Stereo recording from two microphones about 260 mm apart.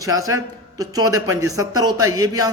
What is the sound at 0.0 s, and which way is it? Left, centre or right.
A man's voice, centre.